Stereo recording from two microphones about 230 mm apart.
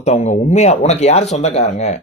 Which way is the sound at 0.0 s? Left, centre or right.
Left.